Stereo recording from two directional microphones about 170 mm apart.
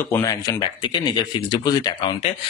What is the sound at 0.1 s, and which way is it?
Speech, 20° left (ahead or behind).